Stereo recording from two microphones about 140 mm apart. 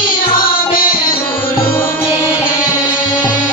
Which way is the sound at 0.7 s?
90° left.